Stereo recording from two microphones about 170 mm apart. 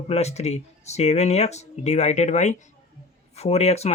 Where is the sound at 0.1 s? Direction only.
40° left (ahead or behind).